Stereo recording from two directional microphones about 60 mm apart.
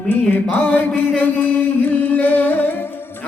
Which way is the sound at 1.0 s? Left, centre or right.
Left.